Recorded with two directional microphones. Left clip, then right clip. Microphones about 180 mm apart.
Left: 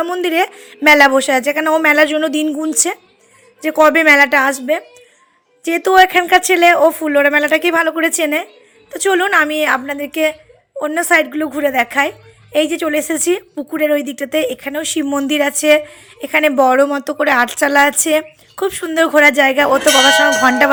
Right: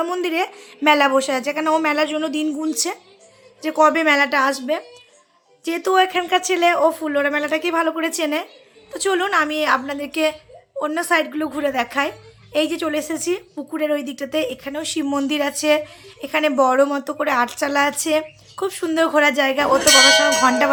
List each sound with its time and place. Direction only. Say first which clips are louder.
0.2 s a woman's voice: left 6 dB; 20° left (ahead or behind)